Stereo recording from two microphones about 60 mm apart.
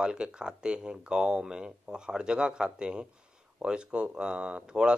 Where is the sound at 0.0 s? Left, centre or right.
Centre.